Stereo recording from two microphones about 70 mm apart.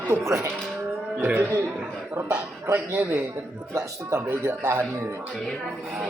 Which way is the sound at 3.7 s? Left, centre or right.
Right.